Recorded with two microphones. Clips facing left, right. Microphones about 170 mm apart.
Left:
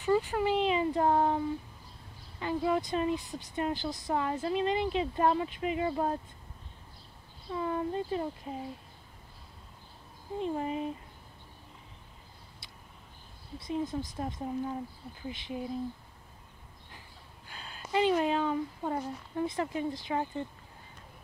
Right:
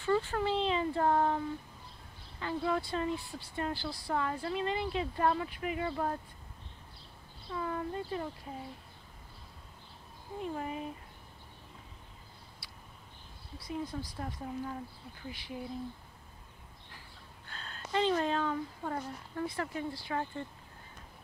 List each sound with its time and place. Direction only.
0.0 s a sound: 15° left (ahead or behind)
2.4 s speech: 15° left (ahead or behind)
7.5 s speech: 25° left (ahead or behind)
10.4 s speech: 25° left (ahead or behind)
12.6 s a sound: 25° left (ahead or behind)
13.6 s speech: 20° left (ahead or behind)
17.5 s speech: 10° left (ahead or behind)